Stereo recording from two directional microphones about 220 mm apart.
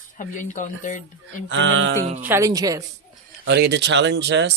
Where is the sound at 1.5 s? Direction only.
60° right (ahead or behind).